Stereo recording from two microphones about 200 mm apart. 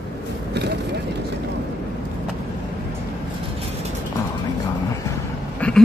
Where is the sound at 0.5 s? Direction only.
55° right (ahead or behind).